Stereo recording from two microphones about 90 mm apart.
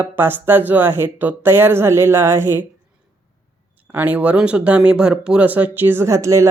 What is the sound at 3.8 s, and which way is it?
Speech, 20° right (ahead or behind).